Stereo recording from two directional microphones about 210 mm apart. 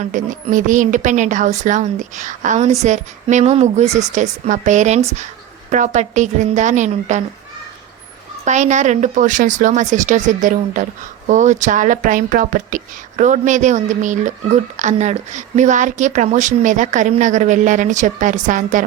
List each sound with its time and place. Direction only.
0.0 s speech: 35° right (ahead or behind)
8.4 s speech: 35° right (ahead or behind)